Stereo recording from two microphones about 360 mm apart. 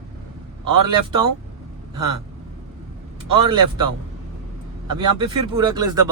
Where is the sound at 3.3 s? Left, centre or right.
Centre.